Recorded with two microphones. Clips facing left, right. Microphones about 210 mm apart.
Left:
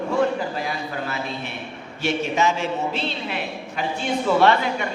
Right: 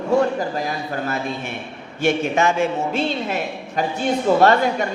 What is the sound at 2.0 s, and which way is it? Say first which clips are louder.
A man's voice: right 3 dB; 50° right (ahead or behind).